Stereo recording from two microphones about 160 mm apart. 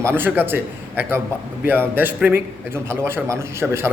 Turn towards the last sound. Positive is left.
turn(degrees=-15)  # may be behind; listen again after turning